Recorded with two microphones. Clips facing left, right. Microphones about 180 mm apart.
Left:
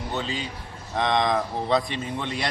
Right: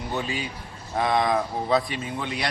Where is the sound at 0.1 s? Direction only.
10° right (ahead or behind).